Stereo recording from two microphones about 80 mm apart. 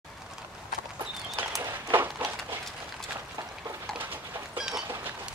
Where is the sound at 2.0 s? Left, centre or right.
Right.